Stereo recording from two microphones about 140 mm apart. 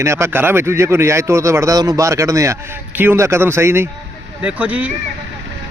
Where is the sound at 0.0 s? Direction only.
20° right (ahead or behind).